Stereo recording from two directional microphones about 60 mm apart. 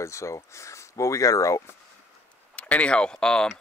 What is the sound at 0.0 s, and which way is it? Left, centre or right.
Speech, left.